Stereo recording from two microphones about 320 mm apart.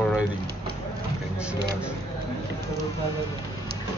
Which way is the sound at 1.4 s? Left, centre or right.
Centre.